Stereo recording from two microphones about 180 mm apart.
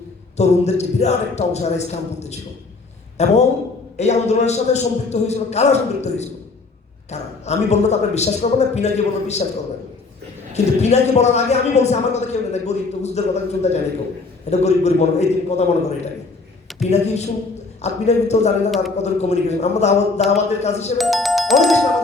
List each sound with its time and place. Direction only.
0.3 s a man's voice: 40° left (ahead or behind)
10.5 s a man's voice: 40° left (ahead or behind)
16.7 s a man's voice: 40° left (ahead or behind)
21.0 s speech: centre (ahead or behind)